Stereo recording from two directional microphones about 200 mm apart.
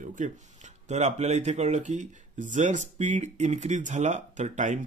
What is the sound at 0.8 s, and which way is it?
Speech, 35° right (ahead or behind).